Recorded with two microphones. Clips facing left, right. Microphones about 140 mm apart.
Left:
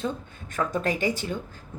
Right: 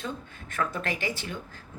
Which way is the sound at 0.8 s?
45° left (ahead or behind).